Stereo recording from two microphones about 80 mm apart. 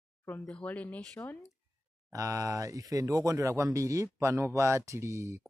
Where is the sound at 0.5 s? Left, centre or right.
Centre.